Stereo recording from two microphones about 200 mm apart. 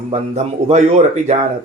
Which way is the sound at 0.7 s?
35° right (ahead or behind).